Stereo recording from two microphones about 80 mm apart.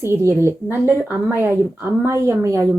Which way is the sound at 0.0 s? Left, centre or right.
Right.